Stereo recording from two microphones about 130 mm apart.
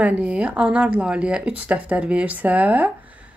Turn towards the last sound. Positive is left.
turn(degrees=-10)  # may be behind; listen again after turning